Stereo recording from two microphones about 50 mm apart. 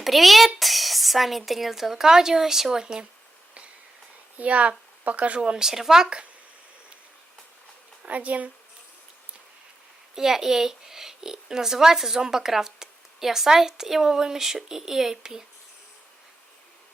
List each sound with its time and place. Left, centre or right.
0.0 s speech: centre
4.4 s a child's voice: right
5.4 s a child's voice: centre
8.0 s speech: right
10.2 s a child's voice: centre